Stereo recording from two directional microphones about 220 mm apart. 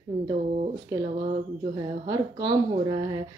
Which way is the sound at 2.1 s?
20° right (ahead or behind).